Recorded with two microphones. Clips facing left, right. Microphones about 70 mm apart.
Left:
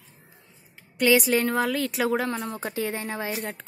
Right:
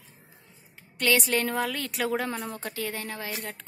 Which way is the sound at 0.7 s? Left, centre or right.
Centre.